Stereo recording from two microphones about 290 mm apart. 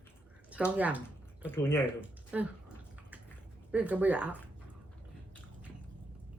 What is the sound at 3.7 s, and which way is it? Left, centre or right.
Speech, centre.